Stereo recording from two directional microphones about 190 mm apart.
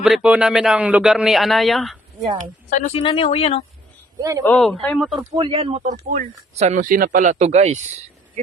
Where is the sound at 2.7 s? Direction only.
35° left (ahead or behind).